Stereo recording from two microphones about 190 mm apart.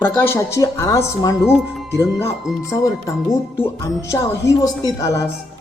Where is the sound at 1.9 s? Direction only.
15° left (ahead or behind).